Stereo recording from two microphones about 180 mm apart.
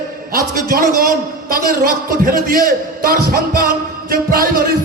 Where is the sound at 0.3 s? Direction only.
50° right (ahead or behind).